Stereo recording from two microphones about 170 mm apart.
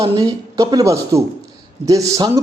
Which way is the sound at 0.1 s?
20° right (ahead or behind).